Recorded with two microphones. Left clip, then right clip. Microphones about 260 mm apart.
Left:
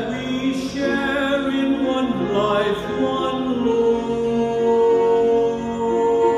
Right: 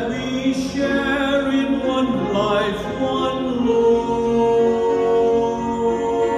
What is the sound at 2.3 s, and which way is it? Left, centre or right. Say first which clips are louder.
Mantra: left 1 dB; centre.